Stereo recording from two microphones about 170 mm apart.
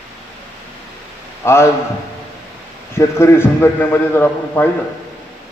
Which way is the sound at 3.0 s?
15° left (ahead or behind).